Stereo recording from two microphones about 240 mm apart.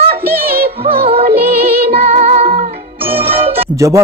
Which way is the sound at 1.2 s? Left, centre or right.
Right.